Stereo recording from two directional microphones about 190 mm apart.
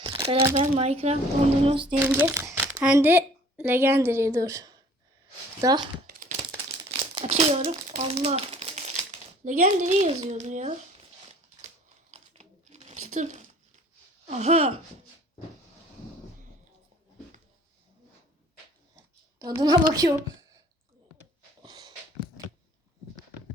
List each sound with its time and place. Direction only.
0.0 s a sound: 20° right (ahead or behind)
0.5 s a woman's voice: 35° right (ahead or behind)
2.1 s a woman's voice: 15° right (ahead or behind)
6.1 s a sound: 45° right (ahead or behind)
7.0 s speech: 25° right (ahead or behind)
12.1 s crumpling: 35° right (ahead or behind)
14.3 s speech: 35° right (ahead or behind)
19.4 s a woman's voice: 20° right (ahead or behind)
21.6 s a sound: 20° right (ahead or behind)